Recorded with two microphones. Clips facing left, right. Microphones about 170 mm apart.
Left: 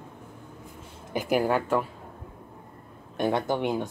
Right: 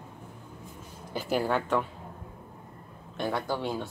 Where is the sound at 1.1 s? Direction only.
15° left (ahead or behind).